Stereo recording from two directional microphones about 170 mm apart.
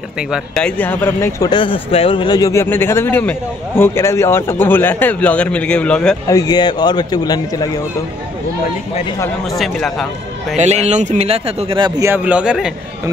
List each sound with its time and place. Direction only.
0.3 s a man's voice: 5° left (ahead or behind)
1.5 s a man's voice: 30° left (ahead or behind); by 6.1 s 5° left (ahead or behind)
6.2 s a man's voice: 20° left (ahead or behind)
9.5 s a man's voice: centre (ahead or behind)
10.6 s a man's voice: 40° right (ahead or behind)
12.0 s a man's voice: 10° right (ahead or behind)